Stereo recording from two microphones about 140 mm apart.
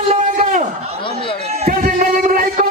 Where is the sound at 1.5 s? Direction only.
50° right (ahead or behind).